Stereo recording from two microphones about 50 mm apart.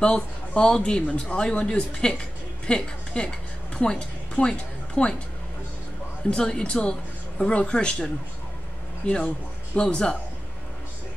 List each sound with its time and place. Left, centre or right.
0.6 s speech: centre
6.3 s speech: centre